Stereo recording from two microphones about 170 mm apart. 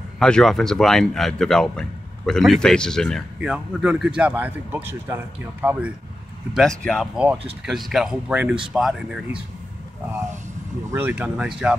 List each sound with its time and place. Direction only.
0.2 s a man's voice: 5° left (ahead or behind)
6.5 s speech: 5° left (ahead or behind)
10.9 s a man's voice: 10° right (ahead or behind)